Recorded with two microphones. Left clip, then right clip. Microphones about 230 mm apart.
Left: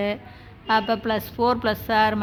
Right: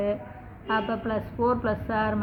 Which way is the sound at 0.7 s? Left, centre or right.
Left.